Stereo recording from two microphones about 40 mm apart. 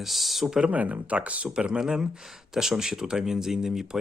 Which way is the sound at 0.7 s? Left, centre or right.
Right.